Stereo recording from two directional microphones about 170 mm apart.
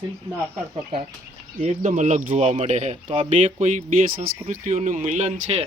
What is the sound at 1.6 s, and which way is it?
Speech, 45° right (ahead or behind).